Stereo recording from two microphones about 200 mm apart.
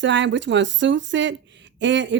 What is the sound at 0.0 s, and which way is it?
Speech, 60° right (ahead or behind).